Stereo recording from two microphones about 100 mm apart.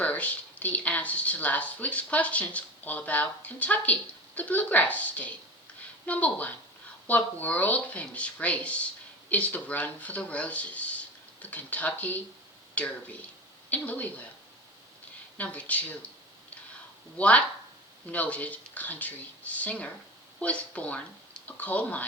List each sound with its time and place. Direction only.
0.0 s speech: 15° left (ahead or behind)
15.4 s speech: 15° left (ahead or behind)
17.2 s speech: 15° left (ahead or behind)